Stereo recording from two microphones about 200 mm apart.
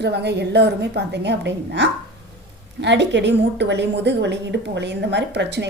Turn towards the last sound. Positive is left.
turn(degrees=-60)  # may be behind; listen again after turning